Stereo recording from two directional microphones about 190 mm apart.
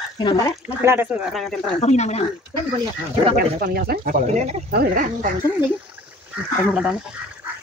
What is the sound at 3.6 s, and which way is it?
Speech, 50° right (ahead or behind).